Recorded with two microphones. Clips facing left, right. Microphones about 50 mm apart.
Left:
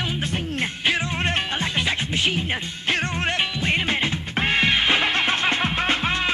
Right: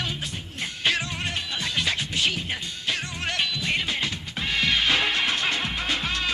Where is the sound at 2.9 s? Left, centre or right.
Left.